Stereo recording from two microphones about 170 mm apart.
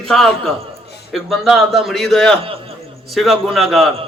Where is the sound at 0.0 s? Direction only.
Centre (ahead or behind).